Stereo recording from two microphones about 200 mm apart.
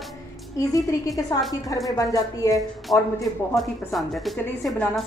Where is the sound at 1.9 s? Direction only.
15° left (ahead or behind).